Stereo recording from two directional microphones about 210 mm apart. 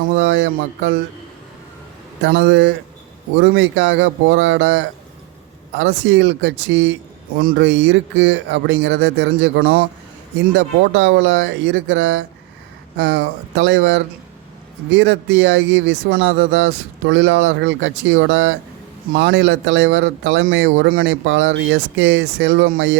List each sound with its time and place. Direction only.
0.2 s speech: 60° right (ahead or behind)
2.2 s speech: 60° right (ahead or behind)
7.3 s speech: 45° right (ahead or behind)
7.6 s speech: 60° right (ahead or behind)
10.9 s speech: 60° right (ahead or behind)